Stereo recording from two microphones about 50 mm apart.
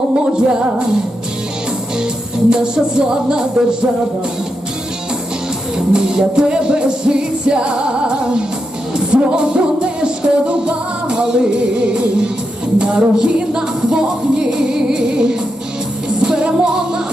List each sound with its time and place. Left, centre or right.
0.3 s music: centre
2.5 s music: centre
5.7 s music: centre